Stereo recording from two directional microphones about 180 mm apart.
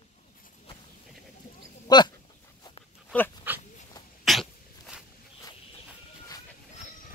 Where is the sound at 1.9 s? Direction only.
25° left (ahead or behind).